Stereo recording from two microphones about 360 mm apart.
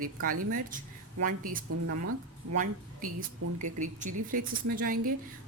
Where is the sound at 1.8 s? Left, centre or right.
Right.